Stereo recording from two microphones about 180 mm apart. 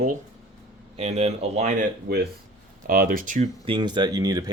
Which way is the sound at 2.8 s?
50° right (ahead or behind).